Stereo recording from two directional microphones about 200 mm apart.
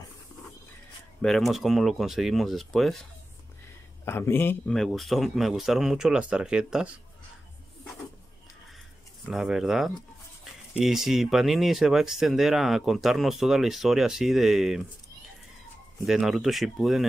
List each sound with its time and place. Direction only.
1.2 s speech: centre (ahead or behind)
4.0 s speech: 10° left (ahead or behind); by 6.9 s 5° right (ahead or behind)
9.3 s speech: centre (ahead or behind)
16.1 s speech: centre (ahead or behind)